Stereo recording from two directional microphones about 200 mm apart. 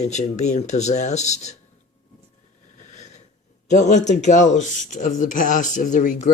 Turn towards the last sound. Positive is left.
turn(degrees=40)  # may be behind; listen again after turning